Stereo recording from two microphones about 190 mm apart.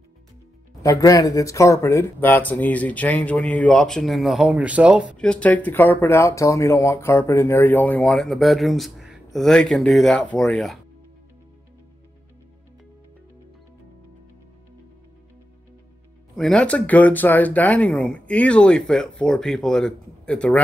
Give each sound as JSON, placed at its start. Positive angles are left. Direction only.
{"t": 0.8, "sound": "speech", "side_deg": 20}
{"t": 5.1, "sound": "speech", "side_deg": 5}
{"t": 16.3, "sound": "speech", "side_deg": 5}